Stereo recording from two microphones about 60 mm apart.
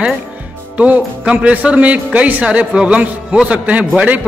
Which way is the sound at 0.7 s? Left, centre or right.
Right.